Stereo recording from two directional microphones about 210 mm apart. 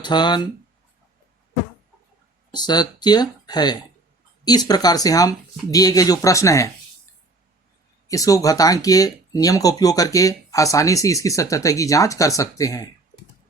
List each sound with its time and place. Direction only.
0.0 s speech: 20° left (ahead or behind)
2.5 s speech: 20° left (ahead or behind)
8.0 s speech: 15° left (ahead or behind)